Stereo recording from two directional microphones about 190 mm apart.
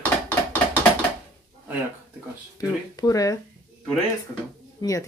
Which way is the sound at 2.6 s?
20° left (ahead or behind).